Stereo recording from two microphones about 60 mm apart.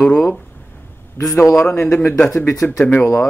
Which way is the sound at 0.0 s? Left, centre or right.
Centre.